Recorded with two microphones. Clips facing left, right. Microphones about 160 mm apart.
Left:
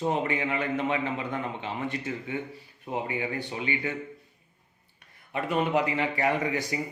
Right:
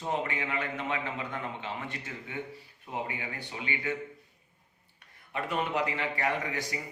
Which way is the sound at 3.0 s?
25° left (ahead or behind).